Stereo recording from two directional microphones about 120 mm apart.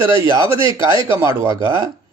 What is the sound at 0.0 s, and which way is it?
Speech, 25° right (ahead or behind).